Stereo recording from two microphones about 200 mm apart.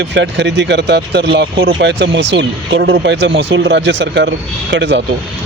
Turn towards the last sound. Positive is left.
turn(degrees=-65)  # may be behind; listen again after turning